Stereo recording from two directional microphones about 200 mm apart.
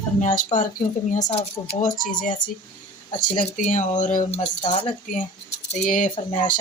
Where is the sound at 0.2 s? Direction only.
40° left (ahead or behind).